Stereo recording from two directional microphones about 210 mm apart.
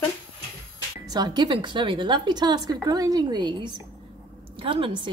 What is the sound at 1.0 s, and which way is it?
Speech, 20° right (ahead or behind).